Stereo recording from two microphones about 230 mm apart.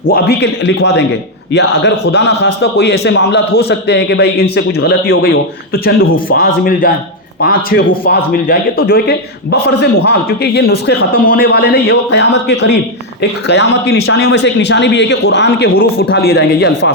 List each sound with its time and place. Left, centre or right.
0.1 s a man's voice: left
8.0 s a man's voice: left